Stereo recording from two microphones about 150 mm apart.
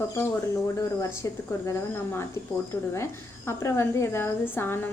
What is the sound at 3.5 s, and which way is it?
A woman's voice, 15° left (ahead or behind).